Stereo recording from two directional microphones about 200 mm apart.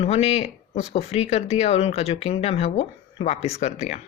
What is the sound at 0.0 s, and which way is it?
Speech, 30° left (ahead or behind).